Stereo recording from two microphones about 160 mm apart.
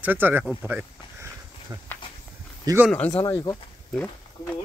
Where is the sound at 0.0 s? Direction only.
10° right (ahead or behind).